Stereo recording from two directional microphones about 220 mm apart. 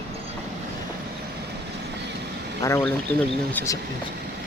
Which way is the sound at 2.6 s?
10° left (ahead or behind).